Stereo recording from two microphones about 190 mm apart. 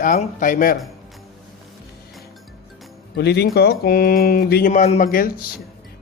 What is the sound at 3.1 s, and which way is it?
A man's voice, 60° left (ahead or behind).